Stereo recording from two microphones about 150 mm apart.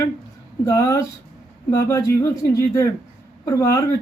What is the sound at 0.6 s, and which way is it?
Speech, 20° left (ahead or behind).